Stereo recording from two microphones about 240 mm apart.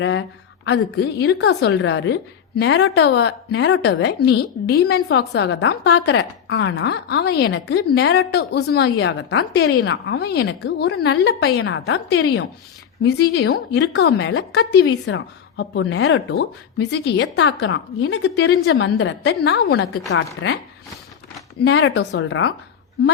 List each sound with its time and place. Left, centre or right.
0.0 s a woman's voice: left
21.6 s a woman's voice: left